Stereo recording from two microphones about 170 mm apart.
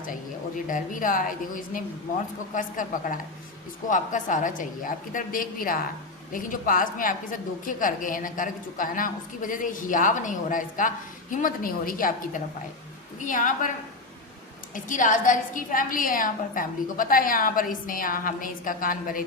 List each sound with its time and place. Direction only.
0.7 s a woman's voice: 50° left (ahead or behind)
2.6 s a woman's voice: 50° left (ahead or behind)
14.8 s a woman's voice: 50° left (ahead or behind)